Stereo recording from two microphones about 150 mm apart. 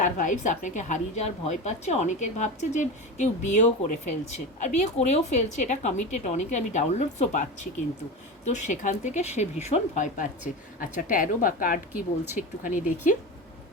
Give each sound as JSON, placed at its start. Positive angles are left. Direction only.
{"t": 0.0, "sound": "a woman's voice", "side_deg": 55}
{"t": 8.4, "sound": "speech", "side_deg": 50}
{"t": 12.2, "sound": "speech", "side_deg": -15}
{"t": 12.6, "sound": "speech", "side_deg": 60}